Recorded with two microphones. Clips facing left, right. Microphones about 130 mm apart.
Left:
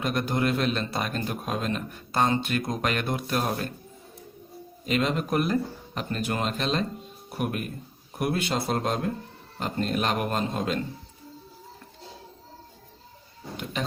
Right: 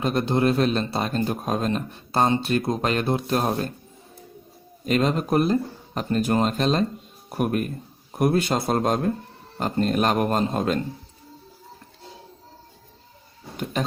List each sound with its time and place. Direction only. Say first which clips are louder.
0.0 s a man's voice: right 5 dB; 30° right (ahead or behind)
4.9 s a man's voice: right 4 dB; 40° right (ahead or behind)